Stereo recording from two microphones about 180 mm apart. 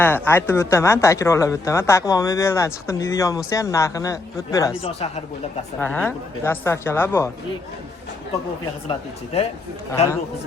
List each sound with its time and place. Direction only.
0.0 s speech: 10° left (ahead or behind)
4.7 s speech: 30° left (ahead or behind)
5.8 s speech: 10° left (ahead or behind)
8.9 s speech: 35° left (ahead or behind)